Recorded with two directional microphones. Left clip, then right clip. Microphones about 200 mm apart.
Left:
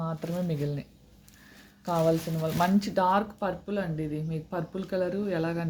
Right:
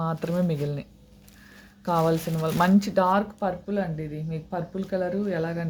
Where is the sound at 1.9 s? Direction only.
15° right (ahead or behind); by 5.6 s 5° left (ahead or behind).